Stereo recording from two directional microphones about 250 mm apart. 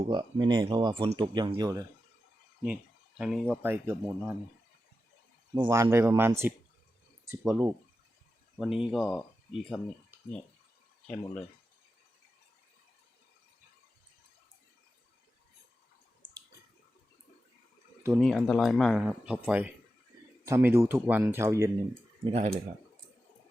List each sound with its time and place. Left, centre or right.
0.1 s speech: centre
3.2 s speech: centre
5.5 s speech: centre
18.2 s speech: centre
22.2 s speech: right